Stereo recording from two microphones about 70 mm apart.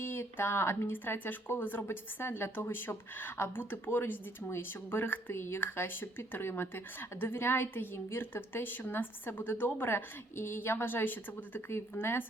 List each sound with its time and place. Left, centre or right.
0.0 s speech: left